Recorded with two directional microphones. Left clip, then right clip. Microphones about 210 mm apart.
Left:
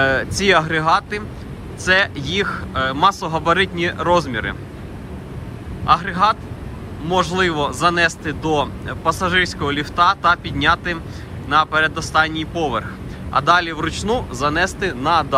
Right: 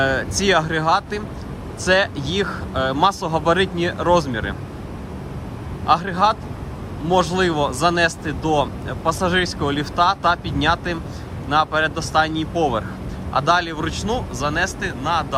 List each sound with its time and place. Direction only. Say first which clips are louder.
0.0 s speech: left 2 dB; 20° right (ahead or behind)
5.8 s speech: left 1 dB; 20° right (ahead or behind)